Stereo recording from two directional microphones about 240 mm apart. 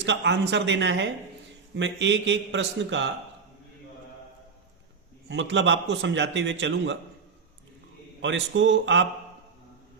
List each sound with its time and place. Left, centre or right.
0.0 s a man's voice: right
5.3 s a man's voice: right
8.2 s a man's voice: right